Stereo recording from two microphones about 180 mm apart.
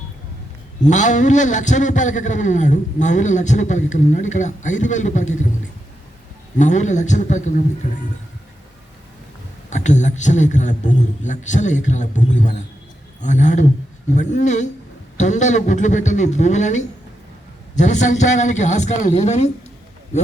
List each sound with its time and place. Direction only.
0.9 s a man's voice: 45° left (ahead or behind)
6.6 s a man's voice: 40° left (ahead or behind)
9.6 s a man's voice: 40° left (ahead or behind)